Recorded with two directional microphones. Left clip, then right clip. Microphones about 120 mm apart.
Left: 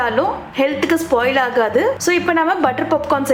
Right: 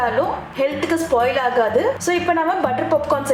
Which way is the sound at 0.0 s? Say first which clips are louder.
Left 2 dB; 40° left (ahead or behind).